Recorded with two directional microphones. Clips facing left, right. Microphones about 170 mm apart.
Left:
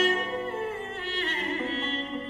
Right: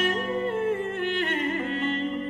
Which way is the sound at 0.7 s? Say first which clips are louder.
Right 7 dB; 55° right (ahead or behind).